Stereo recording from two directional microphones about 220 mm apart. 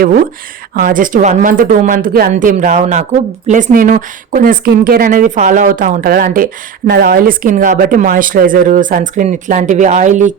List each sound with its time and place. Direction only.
0.7 s speech: 40° right (ahead or behind)